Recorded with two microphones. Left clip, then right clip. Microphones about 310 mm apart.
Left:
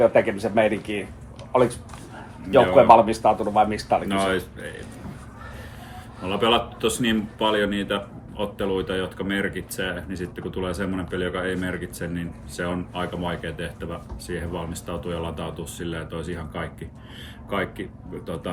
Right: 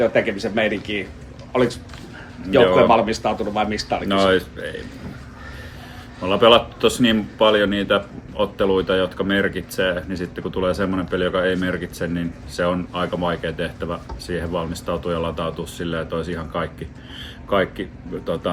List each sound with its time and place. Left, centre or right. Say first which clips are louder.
0.0 s speech: even; centre
2.7 s speech: left 1 dB; centre
4.1 s speech: right 6 dB; centre
6.2 s speech: right 7 dB; centre